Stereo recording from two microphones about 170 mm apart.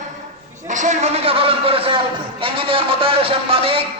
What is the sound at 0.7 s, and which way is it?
A man's voice, 45° right (ahead or behind).